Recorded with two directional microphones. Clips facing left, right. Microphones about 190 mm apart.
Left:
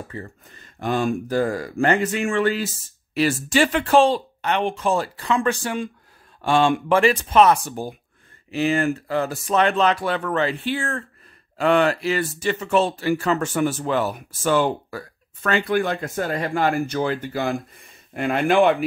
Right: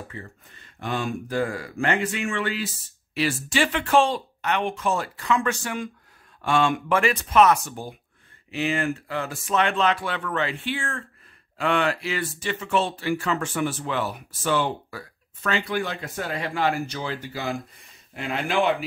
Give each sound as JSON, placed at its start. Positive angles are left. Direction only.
{"t": 0.1, "sound": "speech", "side_deg": 40}